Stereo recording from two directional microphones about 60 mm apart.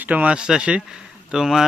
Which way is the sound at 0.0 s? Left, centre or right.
Right.